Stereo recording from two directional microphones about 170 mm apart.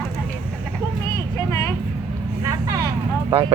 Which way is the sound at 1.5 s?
15° left (ahead or behind).